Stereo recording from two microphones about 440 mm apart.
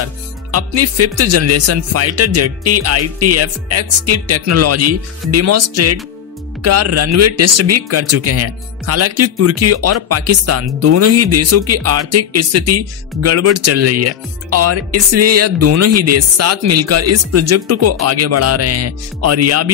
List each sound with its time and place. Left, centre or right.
0.0 s speech: right